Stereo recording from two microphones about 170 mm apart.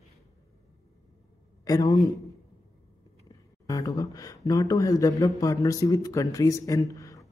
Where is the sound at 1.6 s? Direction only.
20° left (ahead or behind).